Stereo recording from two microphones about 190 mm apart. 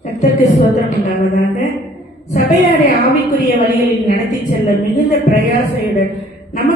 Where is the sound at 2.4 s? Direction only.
60° left (ahead or behind).